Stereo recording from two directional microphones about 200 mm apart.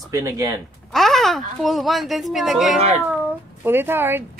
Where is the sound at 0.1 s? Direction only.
15° right (ahead or behind).